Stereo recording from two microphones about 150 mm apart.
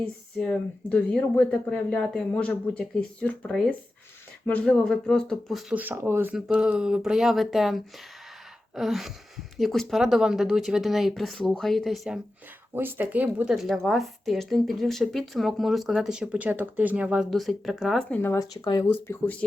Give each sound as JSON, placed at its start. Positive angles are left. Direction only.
{"t": 0.3, "sound": "a woman's voice", "side_deg": 5}
{"t": 6.3, "sound": "a woman's voice", "side_deg": -5}
{"t": 12.7, "sound": "a woman's voice", "side_deg": -15}
{"t": 18.2, "sound": "speech", "side_deg": 15}
{"t": 18.5, "sound": "speech", "side_deg": 30}
{"t": 18.9, "sound": "speech", "side_deg": 15}